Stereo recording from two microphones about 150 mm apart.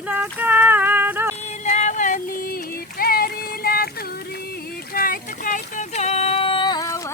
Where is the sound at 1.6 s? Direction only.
50° left (ahead or behind); by 3.8 s 90° left.